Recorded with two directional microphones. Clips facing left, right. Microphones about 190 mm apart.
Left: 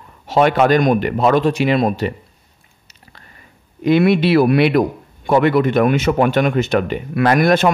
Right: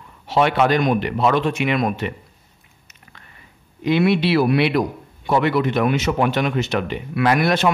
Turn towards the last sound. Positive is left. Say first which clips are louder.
# left 4 dB
turn(degrees=50)  # may be behind; listen again after turning